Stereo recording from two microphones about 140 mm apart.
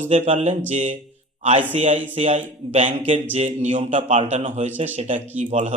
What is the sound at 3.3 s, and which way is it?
Speech, 55° right (ahead or behind).